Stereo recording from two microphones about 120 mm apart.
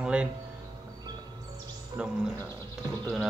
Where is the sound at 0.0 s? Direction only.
10° right (ahead or behind).